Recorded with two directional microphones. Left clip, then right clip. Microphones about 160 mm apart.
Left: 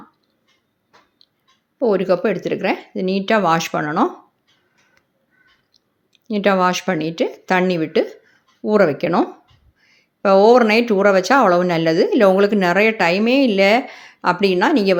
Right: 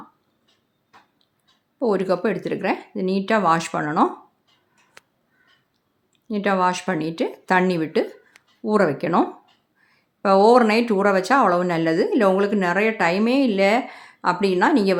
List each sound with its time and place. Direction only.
1.8 s speech: 10° left (ahead or behind)
6.2 s speech: 20° left (ahead or behind)